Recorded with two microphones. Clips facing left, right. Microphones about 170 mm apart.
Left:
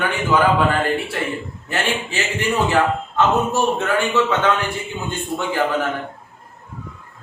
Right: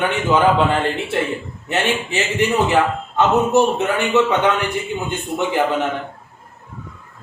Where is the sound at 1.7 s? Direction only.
20° right (ahead or behind).